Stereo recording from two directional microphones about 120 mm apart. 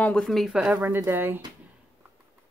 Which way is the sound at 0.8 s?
20° right (ahead or behind).